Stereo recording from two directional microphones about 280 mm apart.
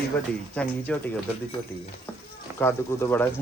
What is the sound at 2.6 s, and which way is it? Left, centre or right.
Speech, centre.